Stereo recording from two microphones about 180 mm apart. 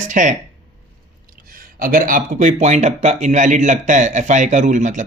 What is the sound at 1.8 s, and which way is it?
Speech, 50° right (ahead or behind).